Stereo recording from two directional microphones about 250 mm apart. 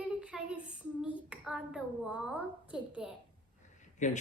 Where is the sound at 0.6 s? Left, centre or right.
Centre.